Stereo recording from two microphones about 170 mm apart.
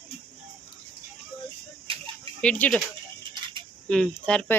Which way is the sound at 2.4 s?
5° left (ahead or behind).